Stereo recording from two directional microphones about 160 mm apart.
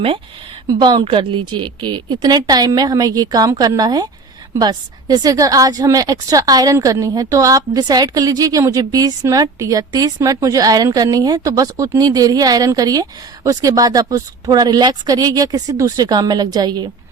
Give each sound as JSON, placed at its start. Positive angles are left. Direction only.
{"t": 0.7, "sound": "a woman's voice", "side_deg": -25}